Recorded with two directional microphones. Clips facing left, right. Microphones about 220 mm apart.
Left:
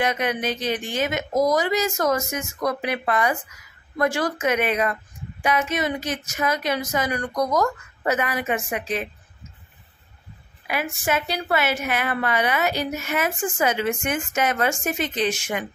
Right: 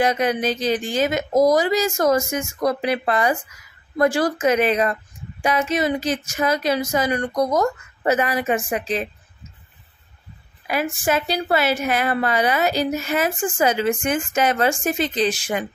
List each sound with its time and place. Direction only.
0.0 s a woman's voice: 35° right (ahead or behind)
10.7 s a woman's voice: 35° right (ahead or behind)